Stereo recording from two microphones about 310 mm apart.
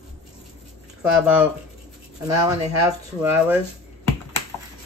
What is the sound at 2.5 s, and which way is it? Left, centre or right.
Speech, centre.